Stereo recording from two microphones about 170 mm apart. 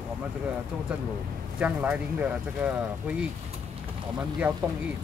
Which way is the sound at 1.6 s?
10° right (ahead or behind).